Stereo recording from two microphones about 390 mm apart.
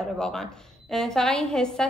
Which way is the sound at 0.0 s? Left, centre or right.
Centre.